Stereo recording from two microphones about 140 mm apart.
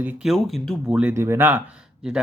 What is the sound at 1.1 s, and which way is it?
Speech, 20° right (ahead or behind).